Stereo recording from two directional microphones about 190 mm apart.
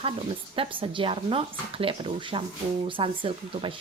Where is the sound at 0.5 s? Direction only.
30° right (ahead or behind).